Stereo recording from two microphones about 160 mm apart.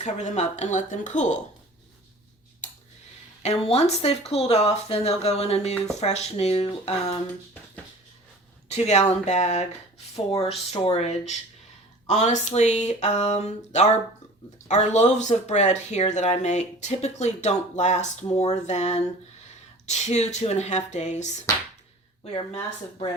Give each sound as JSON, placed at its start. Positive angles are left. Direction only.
{"t": 0.0, "sound": "speech", "side_deg": 45}
{"t": 2.6, "sound": "a sound", "side_deg": 50}
{"t": 3.4, "sound": "speech", "side_deg": 40}
{"t": 8.7, "sound": "speech", "side_deg": 45}